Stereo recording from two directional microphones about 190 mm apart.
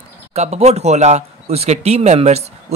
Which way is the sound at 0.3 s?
35° right (ahead or behind).